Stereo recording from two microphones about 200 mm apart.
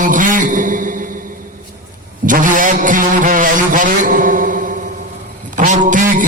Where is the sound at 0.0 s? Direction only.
40° right (ahead or behind).